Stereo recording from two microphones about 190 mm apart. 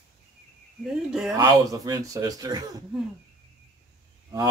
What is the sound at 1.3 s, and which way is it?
Speech, 20° right (ahead or behind).